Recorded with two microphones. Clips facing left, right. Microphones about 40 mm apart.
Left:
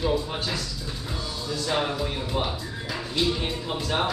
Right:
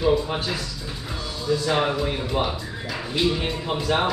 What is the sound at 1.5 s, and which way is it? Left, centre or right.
Speech, centre.